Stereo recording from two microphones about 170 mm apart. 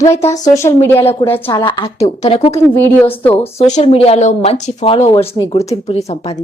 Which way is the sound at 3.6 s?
40° left (ahead or behind).